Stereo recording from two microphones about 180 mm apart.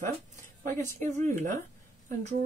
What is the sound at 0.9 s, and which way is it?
Speech, 45° right (ahead or behind).